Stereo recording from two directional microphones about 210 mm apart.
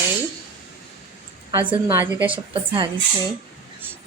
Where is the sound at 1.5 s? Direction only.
10° right (ahead or behind).